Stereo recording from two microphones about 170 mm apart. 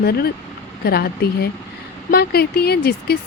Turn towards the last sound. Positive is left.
turn(degrees=70)  # may be behind; listen again after turning